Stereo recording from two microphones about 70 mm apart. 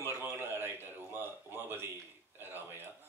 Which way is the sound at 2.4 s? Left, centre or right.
Right.